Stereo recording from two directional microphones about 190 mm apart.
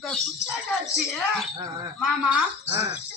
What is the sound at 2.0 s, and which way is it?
Speech, 5° right (ahead or behind).